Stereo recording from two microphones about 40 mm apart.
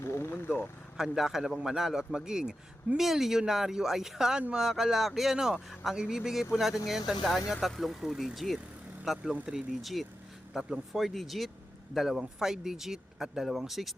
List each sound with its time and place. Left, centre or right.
0.0 s vehicle: left
0.9 s a man's voice: centre
3.0 s a man's voice: centre
9.8 s a man's voice: centre
10.9 s speech: centre
11.9 s a man's voice: centre